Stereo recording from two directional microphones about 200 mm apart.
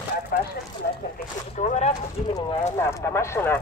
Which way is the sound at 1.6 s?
35° left (ahead or behind).